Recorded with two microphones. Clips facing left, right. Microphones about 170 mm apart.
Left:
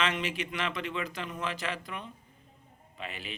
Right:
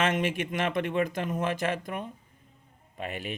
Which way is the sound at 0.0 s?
50° right (ahead or behind).